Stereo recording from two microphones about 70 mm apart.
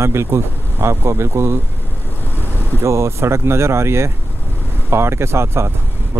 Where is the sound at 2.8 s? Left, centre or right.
Right.